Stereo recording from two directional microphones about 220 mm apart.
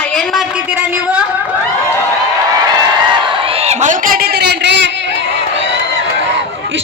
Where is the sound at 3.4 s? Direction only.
25° right (ahead or behind); by 5.2 s 55° right (ahead or behind).